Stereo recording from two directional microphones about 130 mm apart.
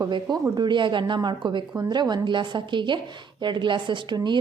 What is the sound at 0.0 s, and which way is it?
A woman's voice, 35° right (ahead or behind).